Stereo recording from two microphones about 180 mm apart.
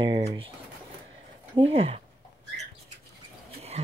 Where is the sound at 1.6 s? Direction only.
35° right (ahead or behind).